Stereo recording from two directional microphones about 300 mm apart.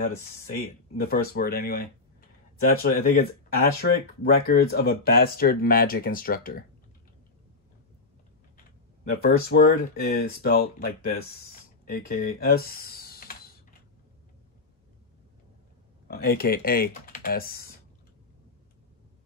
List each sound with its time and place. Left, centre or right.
0.0 s speech: left
9.1 s speech: left
16.1 s speech: left